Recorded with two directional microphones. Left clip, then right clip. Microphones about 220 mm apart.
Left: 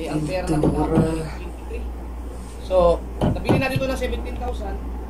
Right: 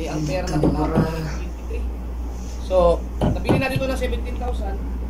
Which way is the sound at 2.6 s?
Centre (ahead or behind).